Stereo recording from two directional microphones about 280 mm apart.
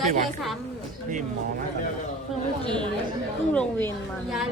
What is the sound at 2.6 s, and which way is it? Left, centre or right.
Speech, centre.